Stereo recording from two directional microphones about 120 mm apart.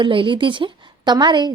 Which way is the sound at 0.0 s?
45° right (ahead or behind).